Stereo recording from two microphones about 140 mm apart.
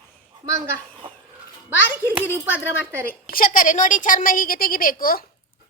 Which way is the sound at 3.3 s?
80° left.